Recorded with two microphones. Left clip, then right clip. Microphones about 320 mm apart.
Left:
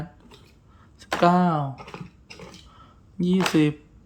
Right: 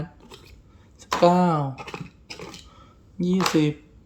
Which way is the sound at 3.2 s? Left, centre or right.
Centre.